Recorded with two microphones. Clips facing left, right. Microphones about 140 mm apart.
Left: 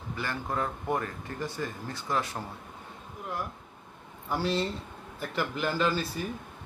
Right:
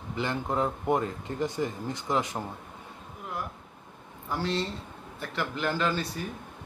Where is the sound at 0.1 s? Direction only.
20° right (ahead or behind).